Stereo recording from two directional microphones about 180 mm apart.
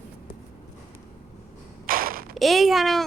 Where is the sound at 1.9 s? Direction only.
55° right (ahead or behind).